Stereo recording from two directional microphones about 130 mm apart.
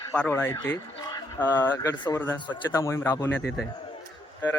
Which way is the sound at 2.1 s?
15° left (ahead or behind).